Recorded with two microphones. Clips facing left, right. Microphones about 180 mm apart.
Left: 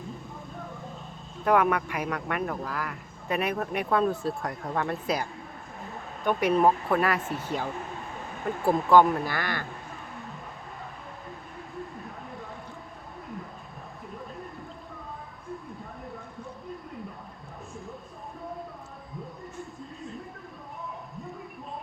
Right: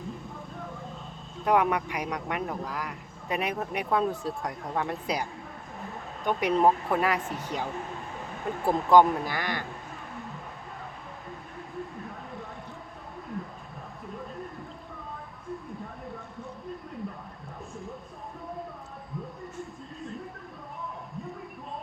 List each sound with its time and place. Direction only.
1.5 s speech: 15° right (ahead or behind)
8.6 s speech: 20° right (ahead or behind)